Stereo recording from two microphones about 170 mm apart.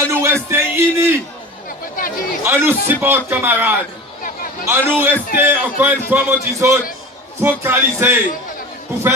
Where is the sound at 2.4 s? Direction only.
15° right (ahead or behind).